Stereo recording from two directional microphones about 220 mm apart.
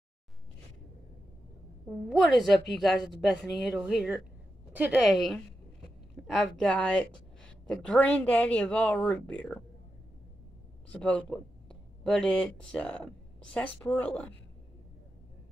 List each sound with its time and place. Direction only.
2.0 s speech: centre (ahead or behind)
10.9 s speech: 5° left (ahead or behind)